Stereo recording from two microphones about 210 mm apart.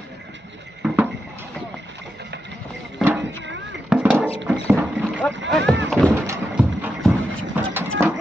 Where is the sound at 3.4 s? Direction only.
60° right (ahead or behind).